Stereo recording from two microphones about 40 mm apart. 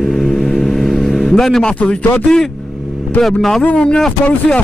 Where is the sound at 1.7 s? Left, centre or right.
Left.